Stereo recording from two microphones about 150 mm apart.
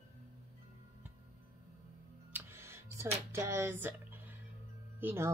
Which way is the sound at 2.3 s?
15° right (ahead or behind).